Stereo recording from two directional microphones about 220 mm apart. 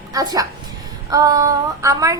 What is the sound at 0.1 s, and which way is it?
A woman's voice, 15° right (ahead or behind).